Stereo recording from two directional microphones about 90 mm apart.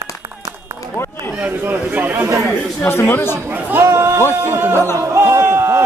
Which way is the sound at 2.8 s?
25° left (ahead or behind).